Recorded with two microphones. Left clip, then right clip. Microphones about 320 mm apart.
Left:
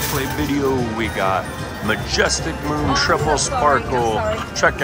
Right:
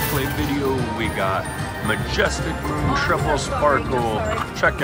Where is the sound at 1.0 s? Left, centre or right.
Centre.